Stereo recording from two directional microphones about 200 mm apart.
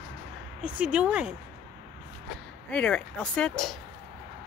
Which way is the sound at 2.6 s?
5° left (ahead or behind).